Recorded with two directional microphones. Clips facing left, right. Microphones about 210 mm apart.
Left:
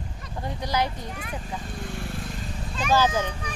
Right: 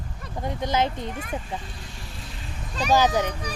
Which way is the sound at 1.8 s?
55° left (ahead or behind).